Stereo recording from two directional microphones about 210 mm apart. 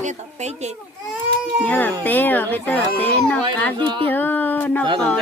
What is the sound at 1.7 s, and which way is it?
Speech, 10° left (ahead or behind).